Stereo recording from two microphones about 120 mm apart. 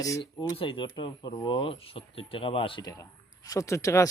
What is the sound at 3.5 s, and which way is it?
Speech, 25° left (ahead or behind).